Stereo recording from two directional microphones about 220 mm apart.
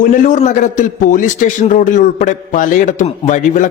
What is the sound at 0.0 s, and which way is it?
A man's voice, 35° left (ahead or behind).